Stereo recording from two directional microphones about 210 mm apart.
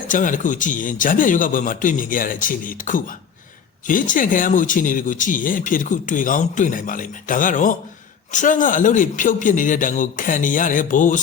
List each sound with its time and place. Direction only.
0.1 s speech: 40° left (ahead or behind)